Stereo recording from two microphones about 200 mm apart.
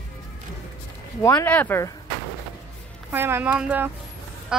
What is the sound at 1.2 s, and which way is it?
Speech, 10° left (ahead or behind).